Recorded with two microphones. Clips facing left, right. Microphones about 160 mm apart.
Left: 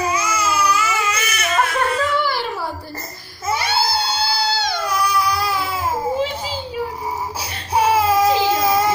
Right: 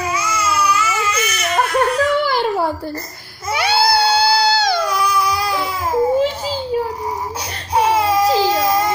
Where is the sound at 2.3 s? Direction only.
55° right (ahead or behind).